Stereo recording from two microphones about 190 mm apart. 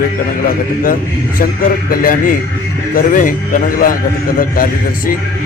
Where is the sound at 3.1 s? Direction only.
45° left (ahead or behind).